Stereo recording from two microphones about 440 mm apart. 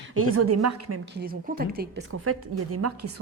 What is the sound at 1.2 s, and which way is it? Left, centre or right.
A woman's voice, centre.